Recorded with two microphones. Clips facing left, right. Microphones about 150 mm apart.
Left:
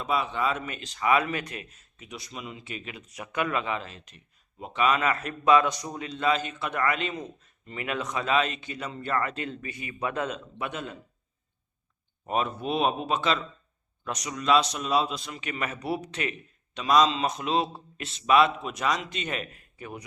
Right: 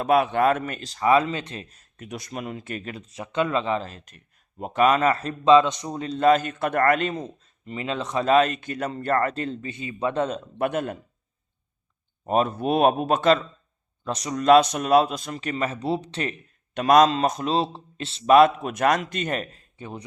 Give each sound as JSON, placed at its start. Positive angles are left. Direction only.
{"t": 0.0, "sound": "speech", "side_deg": -60}
{"t": 3.1, "sound": "speech", "side_deg": -25}
{"t": 7.6, "sound": "speech", "side_deg": -20}
{"t": 10.6, "sound": "speech", "side_deg": -50}
{"t": 12.3, "sound": "speech", "side_deg": -40}
{"t": 14.0, "sound": "speech", "side_deg": -30}
{"t": 16.7, "sound": "speech", "side_deg": -55}
{"t": 18.3, "sound": "speech", "side_deg": -45}
{"t": 19.5, "sound": "speech", "side_deg": -25}